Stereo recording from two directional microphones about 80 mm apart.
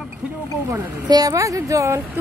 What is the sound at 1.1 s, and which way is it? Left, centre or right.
Speech, right.